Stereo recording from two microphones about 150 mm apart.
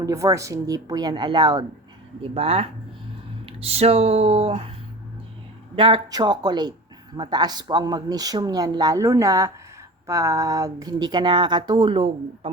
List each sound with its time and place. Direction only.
0.0 s speech: 20° right (ahead or behind)
2.2 s speech: 40° right (ahead or behind)
5.7 s speech: 30° right (ahead or behind)